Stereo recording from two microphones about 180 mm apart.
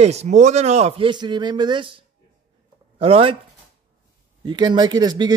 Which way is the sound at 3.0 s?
30° right (ahead or behind).